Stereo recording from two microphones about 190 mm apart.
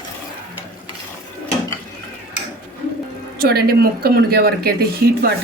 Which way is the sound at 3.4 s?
55° right (ahead or behind).